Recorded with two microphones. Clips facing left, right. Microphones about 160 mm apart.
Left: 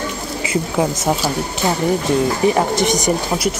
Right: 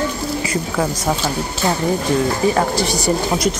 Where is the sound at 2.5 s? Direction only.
20° left (ahead or behind).